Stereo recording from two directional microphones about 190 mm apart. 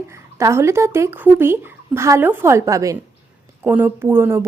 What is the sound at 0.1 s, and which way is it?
Speech, 15° right (ahead or behind).